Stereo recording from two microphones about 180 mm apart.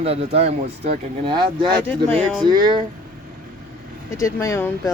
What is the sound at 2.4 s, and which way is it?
Speech, 25° right (ahead or behind).